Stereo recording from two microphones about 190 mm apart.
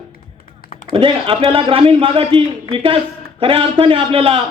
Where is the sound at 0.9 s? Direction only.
25° right (ahead or behind).